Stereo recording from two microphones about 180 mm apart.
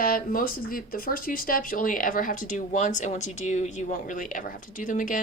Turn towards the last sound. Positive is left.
turn(degrees=45)  # may be behind; listen again after turning